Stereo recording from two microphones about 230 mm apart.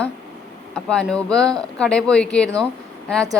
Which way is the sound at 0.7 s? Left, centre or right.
Centre.